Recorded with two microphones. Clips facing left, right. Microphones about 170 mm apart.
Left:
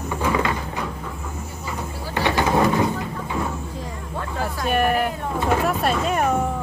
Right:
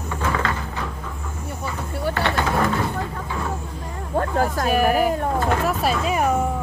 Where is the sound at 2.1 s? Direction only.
15° left (ahead or behind).